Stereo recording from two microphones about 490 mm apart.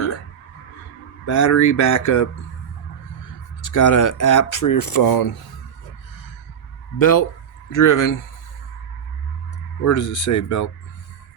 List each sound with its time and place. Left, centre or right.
1.3 s speech: left
3.6 s speech: left
7.0 s speech: left
9.8 s speech: left